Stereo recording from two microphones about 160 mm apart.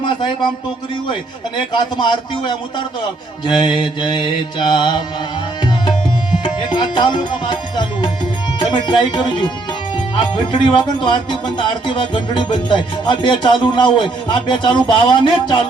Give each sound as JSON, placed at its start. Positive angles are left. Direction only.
{"t": 0.0, "sound": "a sound", "side_deg": 30}
{"t": 1.7, "sound": "speech", "side_deg": 30}
{"t": 6.4, "sound": "music", "side_deg": 30}
{"t": 8.5, "sound": "speech", "side_deg": 30}